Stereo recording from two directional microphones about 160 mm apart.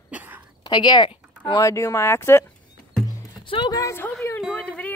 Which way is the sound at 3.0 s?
25° left (ahead or behind).